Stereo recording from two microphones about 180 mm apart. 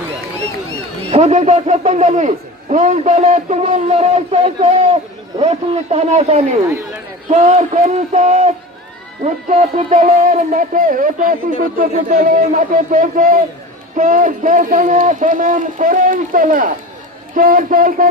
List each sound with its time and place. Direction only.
1.1 s a man's voice: 40° right (ahead or behind)
6.7 s speech: 15° right (ahead or behind)
7.3 s a man's voice: 40° right (ahead or behind)